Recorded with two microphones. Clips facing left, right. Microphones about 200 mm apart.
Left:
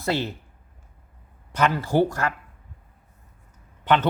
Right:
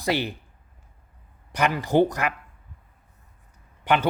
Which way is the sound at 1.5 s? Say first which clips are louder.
Even; 15° right (ahead or behind).